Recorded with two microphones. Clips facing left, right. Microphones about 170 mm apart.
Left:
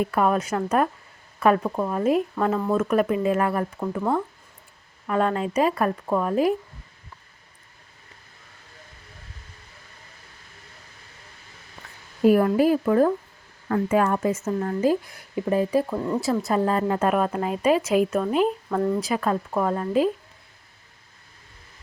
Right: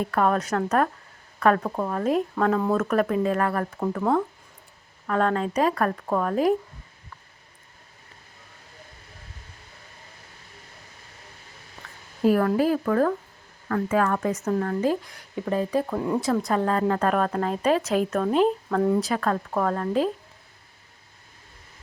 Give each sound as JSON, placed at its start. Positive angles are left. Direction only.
{"t": 0.0, "sound": "speech", "side_deg": 5}
{"t": 12.2, "sound": "speech", "side_deg": 15}
{"t": 14.3, "sound": "speech", "side_deg": 5}